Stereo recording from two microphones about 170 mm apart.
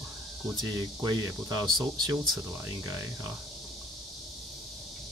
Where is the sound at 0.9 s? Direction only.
25° right (ahead or behind).